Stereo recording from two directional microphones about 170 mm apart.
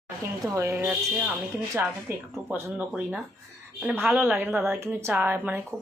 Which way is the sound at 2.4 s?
10° right (ahead or behind).